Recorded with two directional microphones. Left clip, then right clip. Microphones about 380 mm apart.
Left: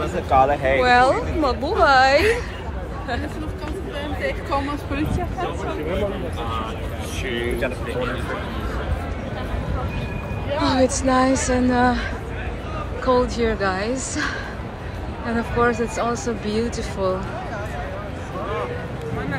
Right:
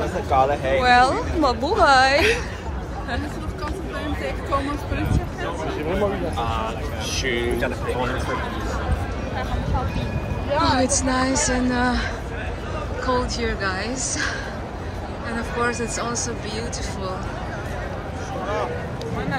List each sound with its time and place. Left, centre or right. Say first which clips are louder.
0.3 s speech: left 3 dB; centre
0.7 s a woman's voice: even; centre
10.6 s speech: left 1 dB; centre